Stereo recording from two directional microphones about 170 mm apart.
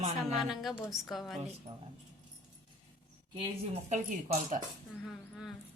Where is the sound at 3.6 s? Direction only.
45° right (ahead or behind).